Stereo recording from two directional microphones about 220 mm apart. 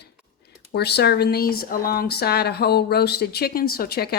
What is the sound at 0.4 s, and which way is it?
Speech, 45° left (ahead or behind).